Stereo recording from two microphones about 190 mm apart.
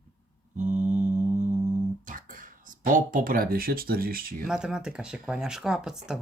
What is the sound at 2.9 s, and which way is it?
Speech, 45° right (ahead or behind).